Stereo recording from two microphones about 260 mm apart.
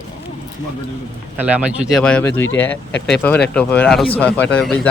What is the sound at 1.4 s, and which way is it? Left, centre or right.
Speech, centre.